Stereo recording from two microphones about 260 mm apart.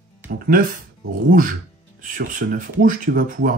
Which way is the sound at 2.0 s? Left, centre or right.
Right.